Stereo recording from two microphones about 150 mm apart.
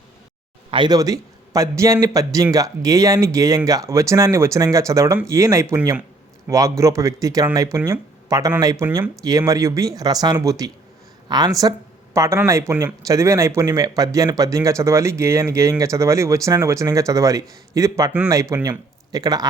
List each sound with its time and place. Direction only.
0.7 s speech: 30° right (ahead or behind)